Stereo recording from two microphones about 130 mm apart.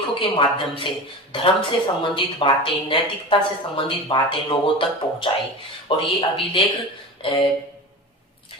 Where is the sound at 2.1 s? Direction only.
40° left (ahead or behind).